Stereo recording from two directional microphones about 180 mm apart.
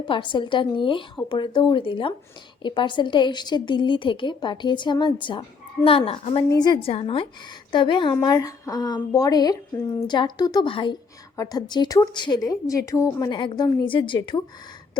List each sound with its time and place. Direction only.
0.0 s a woman's voice: 25° left (ahead or behind)